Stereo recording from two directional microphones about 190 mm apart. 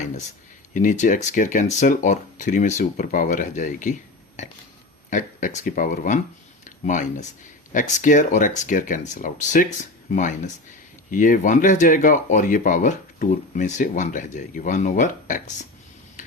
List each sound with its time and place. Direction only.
0.7 s speech: 40° left (ahead or behind)
5.1 s speech: 40° left (ahead or behind)